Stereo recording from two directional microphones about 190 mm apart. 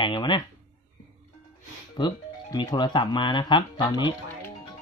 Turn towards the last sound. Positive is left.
turn(degrees=25)  # may be behind; listen again after turning